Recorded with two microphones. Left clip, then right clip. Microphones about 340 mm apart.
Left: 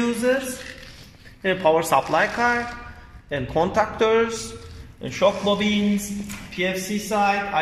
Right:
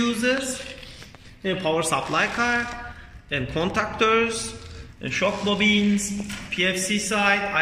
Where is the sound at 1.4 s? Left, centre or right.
Left.